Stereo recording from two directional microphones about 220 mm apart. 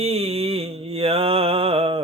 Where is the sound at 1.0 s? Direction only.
25° right (ahead or behind).